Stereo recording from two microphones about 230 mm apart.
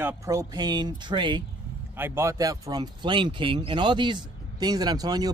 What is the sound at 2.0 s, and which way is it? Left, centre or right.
Speech, centre.